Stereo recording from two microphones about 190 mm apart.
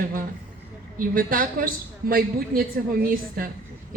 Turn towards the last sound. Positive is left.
turn(degrees=-50)  # may be behind; listen again after turning